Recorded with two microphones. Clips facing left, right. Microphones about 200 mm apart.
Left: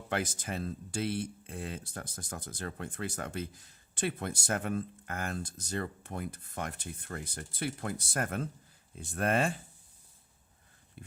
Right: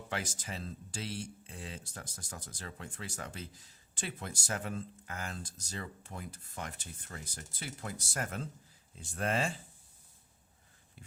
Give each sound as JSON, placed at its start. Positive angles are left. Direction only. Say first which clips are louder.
{"t": 0.1, "sound": "speech", "louder": "left 6 dB", "side_deg": 55}